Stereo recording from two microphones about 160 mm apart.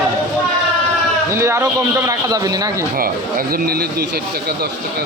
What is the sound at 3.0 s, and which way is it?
Speech, 65° right (ahead or behind).